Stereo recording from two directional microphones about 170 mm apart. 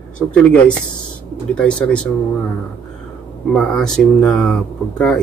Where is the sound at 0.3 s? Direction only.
5° left (ahead or behind).